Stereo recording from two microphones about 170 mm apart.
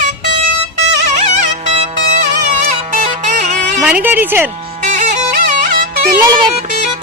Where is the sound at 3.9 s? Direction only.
10° right (ahead or behind).